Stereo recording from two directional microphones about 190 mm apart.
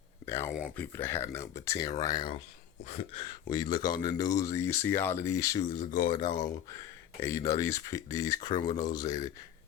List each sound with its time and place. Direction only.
0.3 s a sound: 15° left (ahead or behind)
0.6 s speech: 10° left (ahead or behind)
3.5 s speech: 20° left (ahead or behind)
5.6 s speech: 40° left (ahead or behind)
6.3 s speech: 20° left (ahead or behind)